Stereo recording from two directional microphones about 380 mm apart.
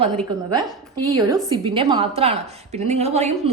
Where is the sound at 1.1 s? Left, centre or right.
Centre.